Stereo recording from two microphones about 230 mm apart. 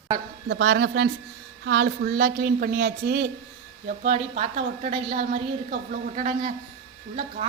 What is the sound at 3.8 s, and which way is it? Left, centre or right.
A woman's voice, right.